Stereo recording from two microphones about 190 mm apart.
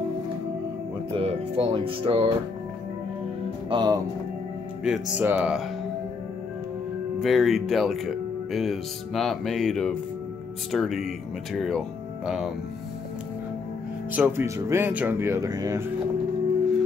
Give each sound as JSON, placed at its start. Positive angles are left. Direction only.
{"t": 1.1, "sound": "speech", "side_deg": -30}
{"t": 3.7, "sound": "speech", "side_deg": -20}
{"t": 4.8, "sound": "speech", "side_deg": -5}
{"t": 7.2, "sound": "speech", "side_deg": 0}
{"t": 14.1, "sound": "speech", "side_deg": -10}